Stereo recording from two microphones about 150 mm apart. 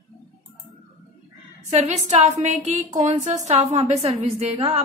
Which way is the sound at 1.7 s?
50° right (ahead or behind).